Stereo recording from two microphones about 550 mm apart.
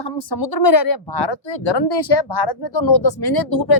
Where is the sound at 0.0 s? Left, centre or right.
Left.